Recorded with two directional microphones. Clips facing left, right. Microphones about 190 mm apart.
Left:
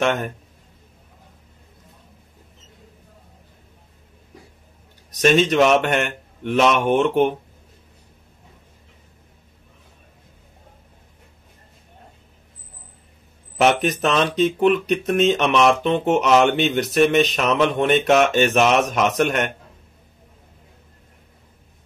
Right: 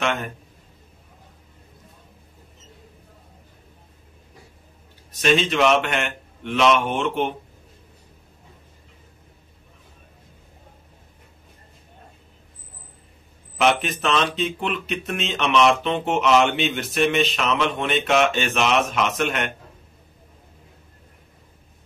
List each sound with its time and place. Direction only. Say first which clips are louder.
0.0 s a man's voice: left 4 dB; 40° left (ahead or behind)
5.2 s speech: left 4 dB; 45° left (ahead or behind)
13.7 s speech: left 3 dB; 40° left (ahead or behind)